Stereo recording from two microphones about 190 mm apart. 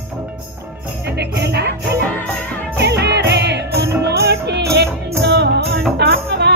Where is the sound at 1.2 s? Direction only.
60° right (ahead or behind).